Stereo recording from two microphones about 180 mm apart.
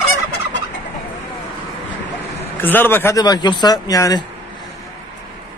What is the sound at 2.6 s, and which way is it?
Speech, 10° left (ahead or behind).